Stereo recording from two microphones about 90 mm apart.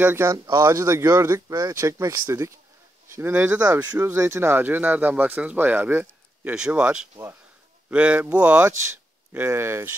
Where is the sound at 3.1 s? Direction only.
20° right (ahead or behind).